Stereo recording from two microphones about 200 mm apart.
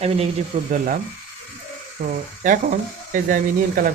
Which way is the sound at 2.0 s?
50° right (ahead or behind).